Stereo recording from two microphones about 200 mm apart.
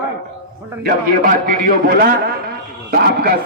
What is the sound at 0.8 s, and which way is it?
A man's voice, 45° right (ahead or behind).